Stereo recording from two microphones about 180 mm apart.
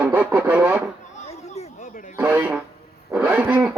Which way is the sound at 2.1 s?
10° right (ahead or behind).